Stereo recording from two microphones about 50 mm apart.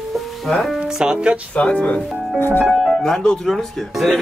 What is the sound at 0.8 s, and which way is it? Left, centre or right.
Speech, centre.